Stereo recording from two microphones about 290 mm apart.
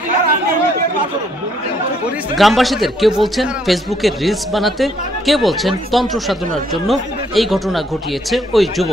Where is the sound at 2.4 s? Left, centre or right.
Centre.